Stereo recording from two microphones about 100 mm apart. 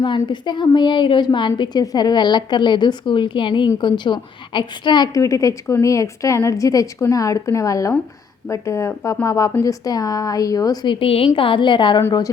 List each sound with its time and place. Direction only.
0.0 s a woman's voice: 50° left (ahead or behind)
5.2 s a woman's voice: 30° left (ahead or behind)
10.8 s a woman's voice: 70° left (ahead or behind)